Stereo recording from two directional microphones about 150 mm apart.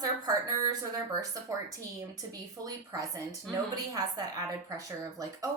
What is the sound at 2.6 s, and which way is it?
Speech, 25° right (ahead or behind).